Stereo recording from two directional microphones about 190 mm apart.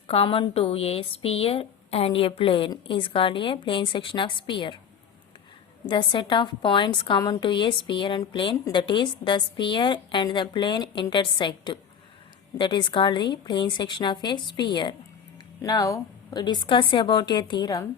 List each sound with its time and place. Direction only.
0.1 s a woman's voice: 30° left (ahead or behind)
5.9 s a woman's voice: 25° left (ahead or behind)